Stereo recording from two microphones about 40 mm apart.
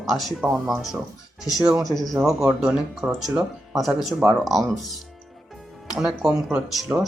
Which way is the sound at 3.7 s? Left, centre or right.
Centre.